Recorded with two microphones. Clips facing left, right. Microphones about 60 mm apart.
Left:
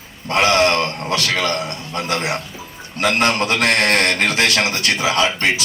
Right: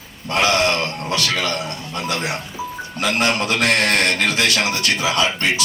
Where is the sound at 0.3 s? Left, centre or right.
Left.